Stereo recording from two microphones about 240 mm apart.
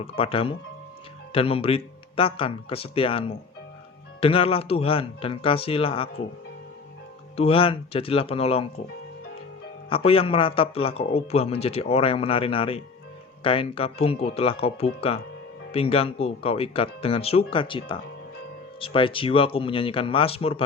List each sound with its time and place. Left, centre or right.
0.0 s a man's voice: left
7.3 s a man's voice: left
9.9 s a man's voice: left